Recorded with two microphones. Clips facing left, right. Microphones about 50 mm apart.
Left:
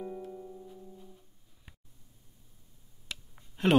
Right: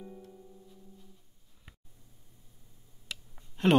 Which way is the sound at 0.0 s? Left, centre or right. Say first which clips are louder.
Left 8 dB; left.